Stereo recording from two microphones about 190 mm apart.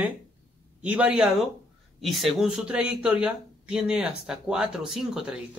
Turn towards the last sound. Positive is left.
turn(degrees=-5)  # may be behind; listen again after turning